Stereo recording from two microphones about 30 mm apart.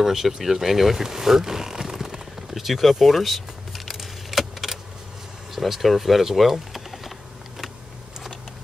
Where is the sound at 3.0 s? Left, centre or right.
Centre.